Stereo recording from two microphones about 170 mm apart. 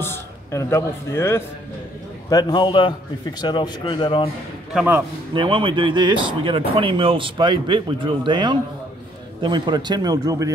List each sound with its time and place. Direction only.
0.0 s a man's voice: 15° left (ahead or behind)
5.3 s speech: 30° right (ahead or behind)